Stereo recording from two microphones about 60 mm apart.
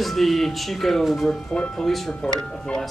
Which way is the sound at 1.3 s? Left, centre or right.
Centre.